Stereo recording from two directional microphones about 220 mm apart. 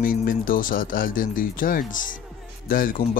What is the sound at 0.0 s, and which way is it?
Speech, 40° left (ahead or behind).